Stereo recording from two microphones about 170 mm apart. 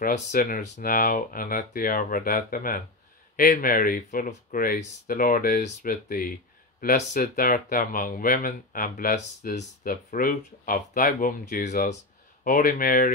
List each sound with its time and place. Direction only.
0.3 s speech: 50° left (ahead or behind)